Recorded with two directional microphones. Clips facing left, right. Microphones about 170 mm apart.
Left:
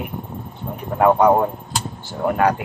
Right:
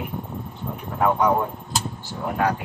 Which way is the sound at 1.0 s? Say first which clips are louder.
Left 6 dB; 60° left (ahead or behind).